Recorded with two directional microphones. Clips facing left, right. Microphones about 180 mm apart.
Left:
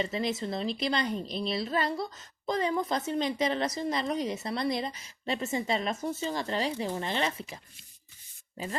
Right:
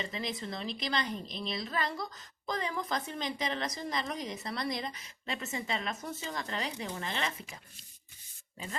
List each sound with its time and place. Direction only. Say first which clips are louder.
0.0 s speech: left 7 dB; 30° left (ahead or behind)